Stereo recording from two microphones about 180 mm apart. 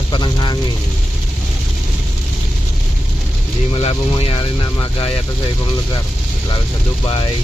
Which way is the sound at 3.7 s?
30° left (ahead or behind).